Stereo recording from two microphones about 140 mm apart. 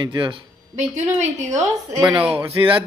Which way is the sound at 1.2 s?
55° right (ahead or behind).